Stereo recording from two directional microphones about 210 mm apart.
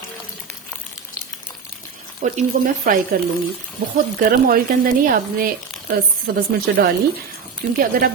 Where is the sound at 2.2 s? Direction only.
40° right (ahead or behind).